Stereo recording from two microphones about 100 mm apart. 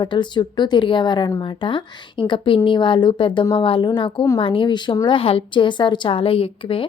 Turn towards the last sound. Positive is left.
turn(degrees=65)  # may be behind; listen again after turning